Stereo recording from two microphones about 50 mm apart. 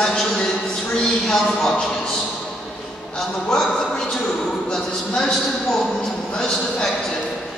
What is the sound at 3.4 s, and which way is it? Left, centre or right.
A man's voice, centre.